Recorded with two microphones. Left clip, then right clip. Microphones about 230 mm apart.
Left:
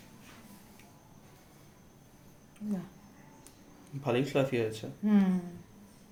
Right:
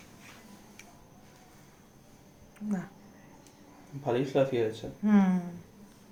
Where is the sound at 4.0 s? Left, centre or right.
Left.